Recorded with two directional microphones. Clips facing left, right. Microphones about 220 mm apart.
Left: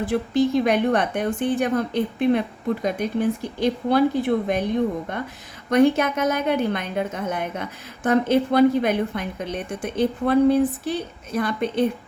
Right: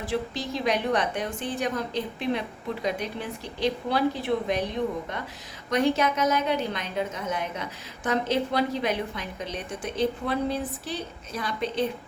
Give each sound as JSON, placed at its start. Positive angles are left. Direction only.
{"t": 0.0, "sound": "a woman's voice", "side_deg": 55}